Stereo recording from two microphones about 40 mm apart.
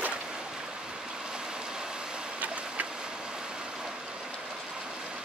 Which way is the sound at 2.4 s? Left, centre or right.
Right.